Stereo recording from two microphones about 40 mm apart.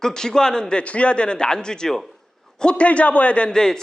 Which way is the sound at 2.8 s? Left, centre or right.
Left.